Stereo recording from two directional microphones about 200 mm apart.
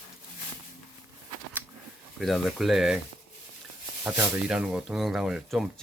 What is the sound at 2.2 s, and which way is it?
Speech, centre (ahead or behind).